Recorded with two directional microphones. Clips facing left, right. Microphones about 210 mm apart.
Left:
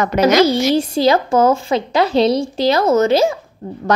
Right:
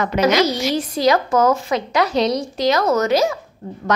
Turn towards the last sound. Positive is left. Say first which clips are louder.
# left 3 dB
turn(degrees=35)  # may be behind; listen again after turning